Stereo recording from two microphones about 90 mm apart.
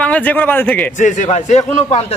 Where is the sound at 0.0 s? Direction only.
15° left (ahead or behind).